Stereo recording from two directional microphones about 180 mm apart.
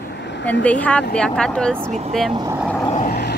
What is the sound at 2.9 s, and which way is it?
Vehicle, 40° left (ahead or behind).